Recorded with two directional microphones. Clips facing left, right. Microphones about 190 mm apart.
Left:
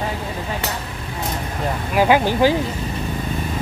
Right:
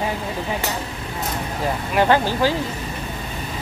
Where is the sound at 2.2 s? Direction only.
15° left (ahead or behind).